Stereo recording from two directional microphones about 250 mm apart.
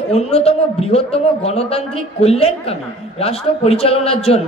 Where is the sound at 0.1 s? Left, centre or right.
Left.